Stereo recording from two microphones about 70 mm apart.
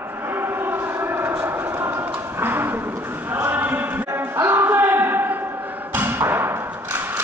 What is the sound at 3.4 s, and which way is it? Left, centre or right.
Music, right.